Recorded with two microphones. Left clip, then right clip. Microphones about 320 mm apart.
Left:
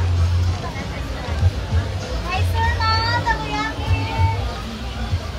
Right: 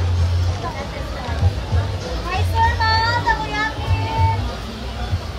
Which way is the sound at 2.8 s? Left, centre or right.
Right.